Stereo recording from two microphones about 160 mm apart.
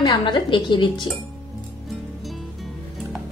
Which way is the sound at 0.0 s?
30° left (ahead or behind).